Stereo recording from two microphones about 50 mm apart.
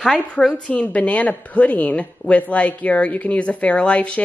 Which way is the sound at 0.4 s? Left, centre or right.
Left.